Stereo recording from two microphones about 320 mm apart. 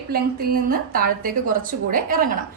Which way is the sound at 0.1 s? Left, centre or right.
Right.